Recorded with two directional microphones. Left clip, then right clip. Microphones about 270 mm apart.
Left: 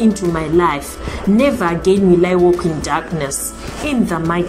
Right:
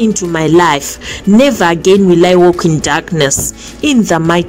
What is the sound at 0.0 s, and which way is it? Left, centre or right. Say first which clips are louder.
A woman's voice: right 4 dB; right.